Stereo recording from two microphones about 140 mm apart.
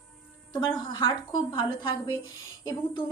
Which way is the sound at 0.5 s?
35° left (ahead or behind).